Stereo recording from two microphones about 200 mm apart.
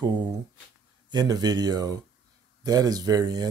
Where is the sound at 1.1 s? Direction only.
20° right (ahead or behind).